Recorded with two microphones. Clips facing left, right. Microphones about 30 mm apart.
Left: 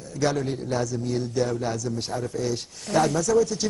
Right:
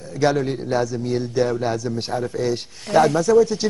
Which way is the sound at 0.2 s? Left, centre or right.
Right.